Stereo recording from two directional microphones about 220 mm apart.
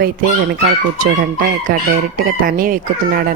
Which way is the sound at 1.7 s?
40° right (ahead or behind).